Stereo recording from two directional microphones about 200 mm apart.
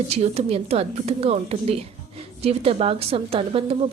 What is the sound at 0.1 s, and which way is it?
Speech, 30° right (ahead or behind).